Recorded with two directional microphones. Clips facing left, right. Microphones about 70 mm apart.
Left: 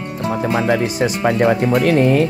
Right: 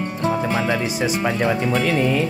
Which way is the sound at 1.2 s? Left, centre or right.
Left.